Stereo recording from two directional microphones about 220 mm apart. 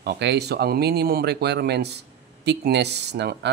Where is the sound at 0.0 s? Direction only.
50° right (ahead or behind).